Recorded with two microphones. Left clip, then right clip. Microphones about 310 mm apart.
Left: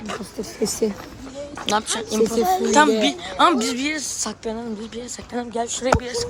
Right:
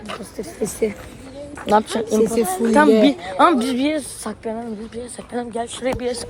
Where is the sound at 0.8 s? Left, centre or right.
Centre.